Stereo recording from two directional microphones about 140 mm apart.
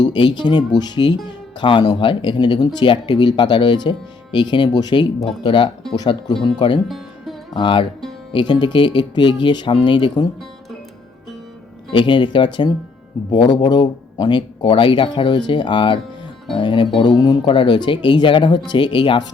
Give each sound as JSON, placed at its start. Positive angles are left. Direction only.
{"t": 0.0, "sound": "speech", "side_deg": 30}
{"t": 6.8, "sound": "music", "side_deg": 0}
{"t": 7.5, "sound": "speech", "side_deg": 35}
{"t": 11.9, "sound": "speech", "side_deg": 35}